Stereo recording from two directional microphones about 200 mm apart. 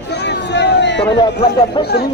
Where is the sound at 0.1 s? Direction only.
55° left (ahead or behind).